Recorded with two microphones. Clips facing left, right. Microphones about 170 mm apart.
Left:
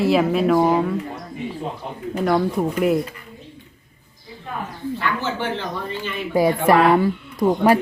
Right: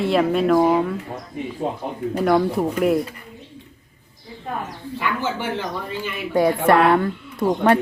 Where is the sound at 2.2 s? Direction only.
Centre (ahead or behind).